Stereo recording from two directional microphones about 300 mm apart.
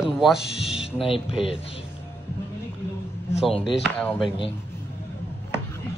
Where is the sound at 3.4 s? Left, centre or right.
Centre.